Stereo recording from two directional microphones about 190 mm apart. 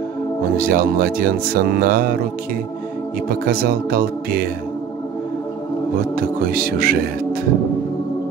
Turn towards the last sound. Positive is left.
turn(degrees=-50)  # may be behind; listen again after turning